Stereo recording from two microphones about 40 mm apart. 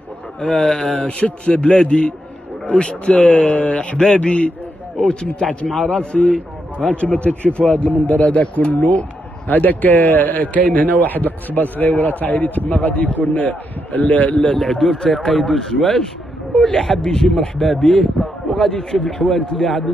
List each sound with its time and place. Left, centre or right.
0.4 s a man's voice: left
1.7 s a man's voice: centre
6.9 s a man's voice: left
7.9 s a man's voice: left
8.3 s a man's voice: left
9.5 s a man's voice: left
14.5 s a woman's voice: centre
17.8 s a sound: centre
18.6 s speech: centre